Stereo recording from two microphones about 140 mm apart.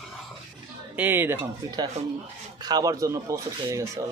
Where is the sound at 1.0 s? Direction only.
15° right (ahead or behind).